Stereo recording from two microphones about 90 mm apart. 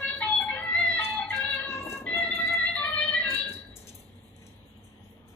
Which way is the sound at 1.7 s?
30° left (ahead or behind).